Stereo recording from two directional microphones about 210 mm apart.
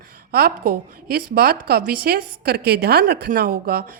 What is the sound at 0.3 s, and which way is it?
A woman's voice, 50° right (ahead or behind).